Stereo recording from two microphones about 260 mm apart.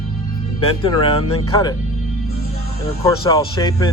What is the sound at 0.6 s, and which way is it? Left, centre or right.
Speech, left.